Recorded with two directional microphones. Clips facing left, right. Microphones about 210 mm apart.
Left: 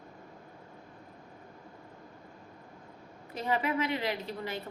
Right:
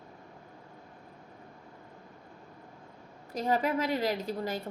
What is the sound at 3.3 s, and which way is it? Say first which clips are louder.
A woman's voice: right 2 dB; 40° right (ahead or behind).